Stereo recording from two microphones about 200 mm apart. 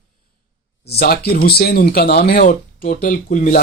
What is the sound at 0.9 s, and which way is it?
Speech, 50° left (ahead or behind).